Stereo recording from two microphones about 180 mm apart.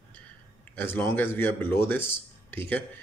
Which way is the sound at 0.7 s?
10° left (ahead or behind).